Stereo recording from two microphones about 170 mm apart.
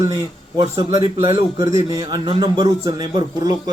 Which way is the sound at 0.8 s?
20° right (ahead or behind).